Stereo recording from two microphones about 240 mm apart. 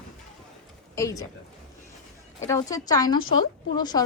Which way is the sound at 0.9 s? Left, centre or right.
Centre.